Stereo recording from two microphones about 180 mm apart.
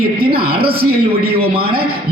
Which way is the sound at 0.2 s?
60° right (ahead or behind).